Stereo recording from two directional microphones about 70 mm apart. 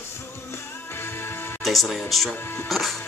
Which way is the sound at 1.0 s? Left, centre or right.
Left.